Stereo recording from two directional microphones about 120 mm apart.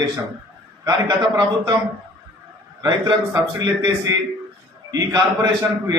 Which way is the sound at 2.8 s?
35° right (ahead or behind).